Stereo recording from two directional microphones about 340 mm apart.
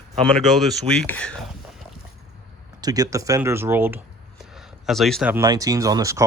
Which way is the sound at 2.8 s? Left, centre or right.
Centre.